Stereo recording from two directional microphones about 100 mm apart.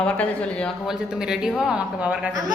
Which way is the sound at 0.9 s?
5° right (ahead or behind).